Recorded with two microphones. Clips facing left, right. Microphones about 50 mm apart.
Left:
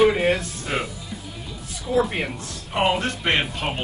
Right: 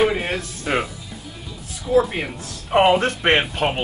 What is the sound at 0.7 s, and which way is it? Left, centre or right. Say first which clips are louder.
Speech: right 5 dB; right.